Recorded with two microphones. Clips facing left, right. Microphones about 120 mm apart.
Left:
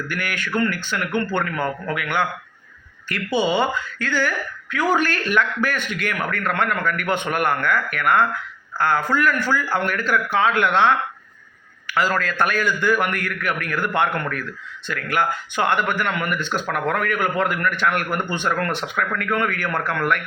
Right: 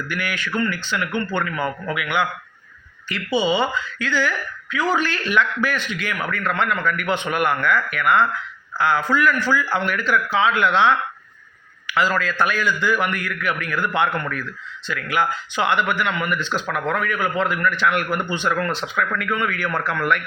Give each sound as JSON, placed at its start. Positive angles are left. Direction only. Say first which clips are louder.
{"t": 0.1, "sound": "a man's voice", "louder": "even", "side_deg": 45}